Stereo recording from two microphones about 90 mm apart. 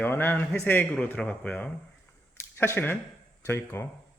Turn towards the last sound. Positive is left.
turn(degrees=25)  # may be behind; listen again after turning